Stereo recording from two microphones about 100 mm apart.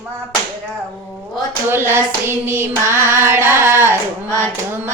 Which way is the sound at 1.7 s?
25° right (ahead or behind).